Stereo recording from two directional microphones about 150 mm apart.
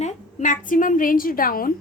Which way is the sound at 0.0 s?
55° left (ahead or behind).